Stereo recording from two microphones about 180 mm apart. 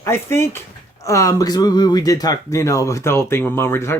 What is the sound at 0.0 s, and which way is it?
Speech, 15° left (ahead or behind).